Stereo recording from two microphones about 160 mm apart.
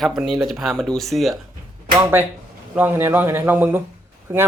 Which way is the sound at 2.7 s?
10° right (ahead or behind).